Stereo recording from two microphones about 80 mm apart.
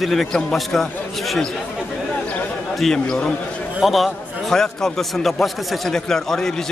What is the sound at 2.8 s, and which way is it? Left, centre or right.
A man's voice, centre.